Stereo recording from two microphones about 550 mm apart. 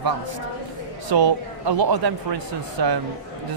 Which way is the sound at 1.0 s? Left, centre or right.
Right.